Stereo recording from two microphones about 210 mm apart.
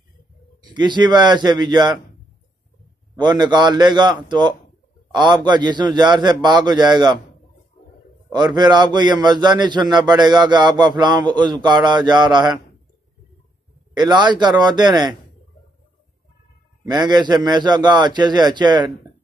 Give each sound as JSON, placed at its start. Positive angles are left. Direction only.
{"t": 0.7, "sound": "speech", "side_deg": -20}
{"t": 3.2, "sound": "speech", "side_deg": -20}
{"t": 8.5, "sound": "speech", "side_deg": -20}
{"t": 13.9, "sound": "speech", "side_deg": -20}
{"t": 16.9, "sound": "speech", "side_deg": -20}